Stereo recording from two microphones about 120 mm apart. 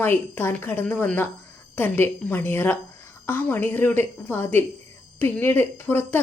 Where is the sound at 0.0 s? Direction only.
15° left (ahead or behind).